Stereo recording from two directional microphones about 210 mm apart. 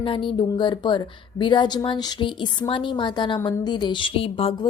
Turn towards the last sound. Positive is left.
turn(degrees=25)  # may be behind; listen again after turning